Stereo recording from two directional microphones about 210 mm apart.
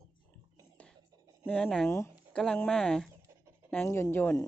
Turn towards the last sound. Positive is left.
turn(degrees=10)  # may be behind; listen again after turning